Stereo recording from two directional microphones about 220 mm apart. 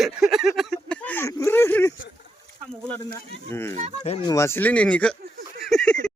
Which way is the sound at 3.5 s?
10° left (ahead or behind).